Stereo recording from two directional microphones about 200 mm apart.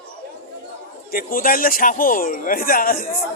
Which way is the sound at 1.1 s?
45° left (ahead or behind).